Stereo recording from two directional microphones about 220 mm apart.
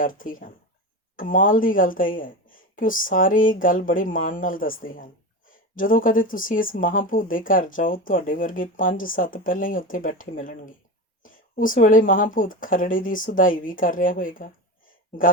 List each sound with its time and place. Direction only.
0.0 s speech: 40° left (ahead or behind)